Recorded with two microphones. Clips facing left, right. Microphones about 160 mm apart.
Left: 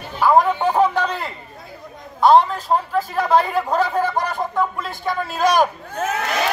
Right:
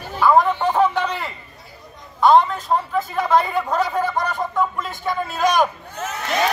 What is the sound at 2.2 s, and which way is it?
Speech, 35° left (ahead or behind).